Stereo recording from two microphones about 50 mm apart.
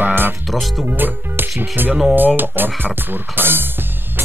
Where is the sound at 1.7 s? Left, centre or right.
Right.